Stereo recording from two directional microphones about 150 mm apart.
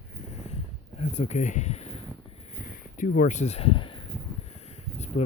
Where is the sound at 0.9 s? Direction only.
45° left (ahead or behind).